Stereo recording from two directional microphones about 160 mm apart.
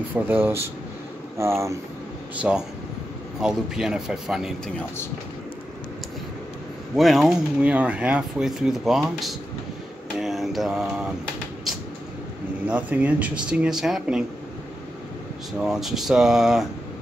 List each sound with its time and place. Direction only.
0.1 s speech: 15° right (ahead or behind)
2.4 s speech: 5° right (ahead or behind)
7.0 s speech: centre (ahead or behind)
10.1 s mantra: centre (ahead or behind)
12.6 s speech: 10° right (ahead or behind)
15.6 s speech: centre (ahead or behind)